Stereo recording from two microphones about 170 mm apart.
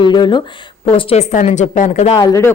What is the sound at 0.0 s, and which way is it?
Speech, 25° left (ahead or behind).